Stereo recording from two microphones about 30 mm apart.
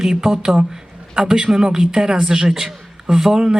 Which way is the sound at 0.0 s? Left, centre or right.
Centre.